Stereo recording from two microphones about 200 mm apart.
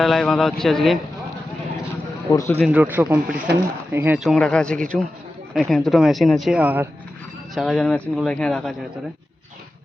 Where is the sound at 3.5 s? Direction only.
55° right (ahead or behind).